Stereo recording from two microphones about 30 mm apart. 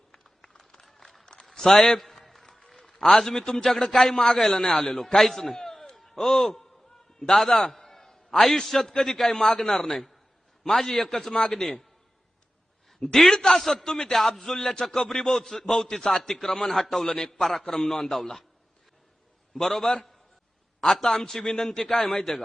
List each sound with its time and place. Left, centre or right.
0.1 s a sound: left
1.5 s a man's voice: centre
2.0 s a sound: centre
2.6 s a man's voice: centre
7.7 s a sound: centre
8.6 s a man's voice: centre
11.3 s a man's voice: left
13.0 s a man's voice: left
13.5 s a man's voice: centre
17.1 s a man's voice: centre
19.5 s a man's voice: centre